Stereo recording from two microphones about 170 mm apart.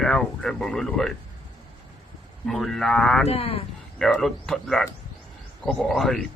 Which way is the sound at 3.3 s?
35° left (ahead or behind).